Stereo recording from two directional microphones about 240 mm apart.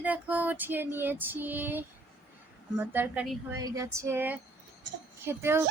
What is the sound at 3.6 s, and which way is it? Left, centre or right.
Speech, centre.